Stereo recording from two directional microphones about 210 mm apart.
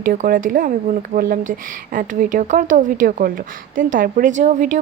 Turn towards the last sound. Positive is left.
turn(degrees=-35)  # may be behind; listen again after turning